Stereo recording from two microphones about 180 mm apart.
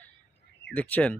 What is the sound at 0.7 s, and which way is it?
Speech, 10° left (ahead or behind).